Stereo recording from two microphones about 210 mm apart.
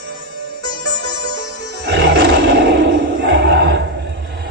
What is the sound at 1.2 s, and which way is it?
Music, 55° right (ahead or behind).